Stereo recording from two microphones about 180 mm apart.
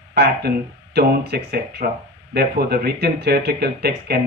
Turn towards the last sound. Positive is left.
turn(degrees=-60)  # may be behind; listen again after turning